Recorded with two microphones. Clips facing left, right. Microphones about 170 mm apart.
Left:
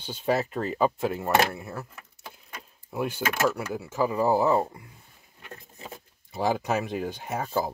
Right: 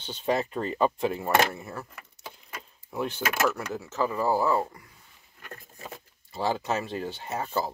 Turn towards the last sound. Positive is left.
turn(degrees=10)  # may be behind; listen again after turning